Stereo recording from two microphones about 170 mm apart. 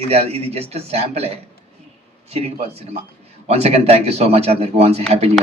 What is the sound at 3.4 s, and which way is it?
Speech, 40° right (ahead or behind).